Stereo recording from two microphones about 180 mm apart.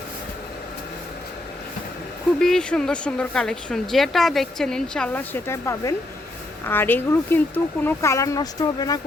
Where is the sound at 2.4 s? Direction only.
5° left (ahead or behind).